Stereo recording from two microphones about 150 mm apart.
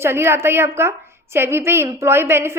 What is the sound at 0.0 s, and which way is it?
A woman's voice, 15° right (ahead or behind).